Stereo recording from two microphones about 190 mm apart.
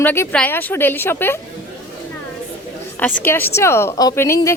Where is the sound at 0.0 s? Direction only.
10° left (ahead or behind).